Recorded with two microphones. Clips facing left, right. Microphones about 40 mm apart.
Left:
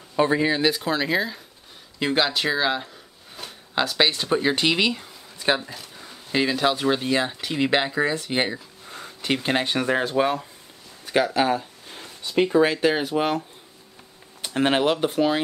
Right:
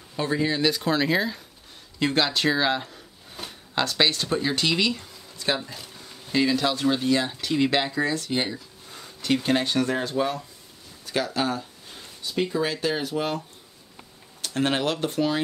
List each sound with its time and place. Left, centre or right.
0.1 s speech: left; by 1.4 s centre
2.0 s a sound: centre
3.7 s speech: centre
5.6 s speech: centre
5.9 s speech: left
11.1 s a sound: left
12.0 s speech: left
14.4 s speech: left